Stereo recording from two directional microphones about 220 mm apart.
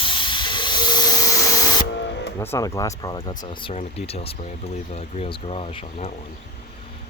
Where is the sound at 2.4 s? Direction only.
15° left (ahead or behind).